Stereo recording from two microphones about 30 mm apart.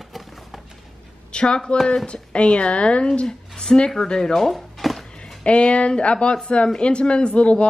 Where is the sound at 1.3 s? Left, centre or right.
Left.